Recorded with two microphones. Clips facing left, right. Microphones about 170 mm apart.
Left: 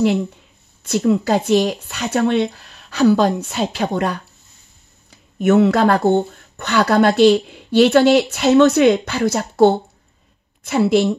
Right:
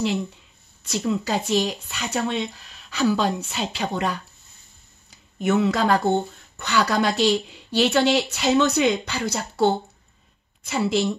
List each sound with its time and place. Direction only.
0.9 s speech: 50° left (ahead or behind)
5.4 s speech: 55° left (ahead or behind)